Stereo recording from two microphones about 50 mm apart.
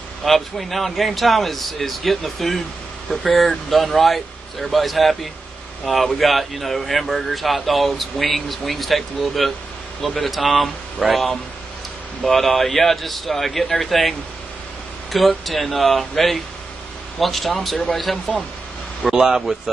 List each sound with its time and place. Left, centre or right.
0.2 s speech: centre
15.1 s speech: centre
19.1 s speech: centre